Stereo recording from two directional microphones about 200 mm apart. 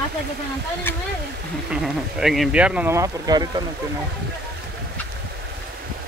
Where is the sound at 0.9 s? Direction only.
10° left (ahead or behind).